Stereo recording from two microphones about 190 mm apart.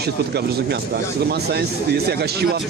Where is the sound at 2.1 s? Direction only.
55° right (ahead or behind).